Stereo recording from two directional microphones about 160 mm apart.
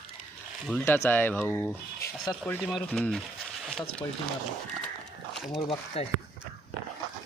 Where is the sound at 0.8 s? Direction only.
15° left (ahead or behind).